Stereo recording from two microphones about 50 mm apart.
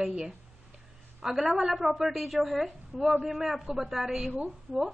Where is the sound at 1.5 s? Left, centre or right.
Centre.